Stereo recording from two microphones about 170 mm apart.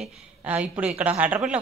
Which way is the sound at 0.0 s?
10° right (ahead or behind).